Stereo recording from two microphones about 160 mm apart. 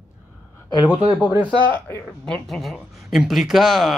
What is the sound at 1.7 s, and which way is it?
Speech, 15° left (ahead or behind).